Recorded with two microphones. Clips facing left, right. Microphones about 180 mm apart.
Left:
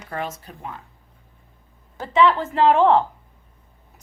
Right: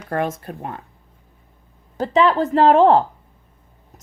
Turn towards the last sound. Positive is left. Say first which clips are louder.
# right 3 dB
turn(degrees=-35)  # may be behind; listen again after turning